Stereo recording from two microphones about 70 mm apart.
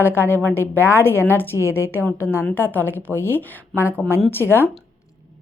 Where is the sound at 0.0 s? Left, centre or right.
Left.